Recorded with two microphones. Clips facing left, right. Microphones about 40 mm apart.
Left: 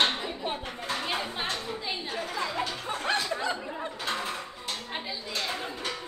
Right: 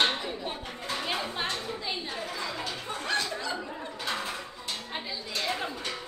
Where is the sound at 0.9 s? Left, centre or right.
Centre.